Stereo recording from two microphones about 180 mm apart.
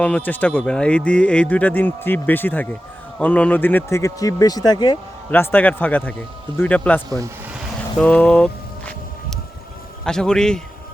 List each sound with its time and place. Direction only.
0.0 s speech: 10° left (ahead or behind)
5.3 s speech: 10° left (ahead or behind)
10.0 s a man's voice: 5° left (ahead or behind)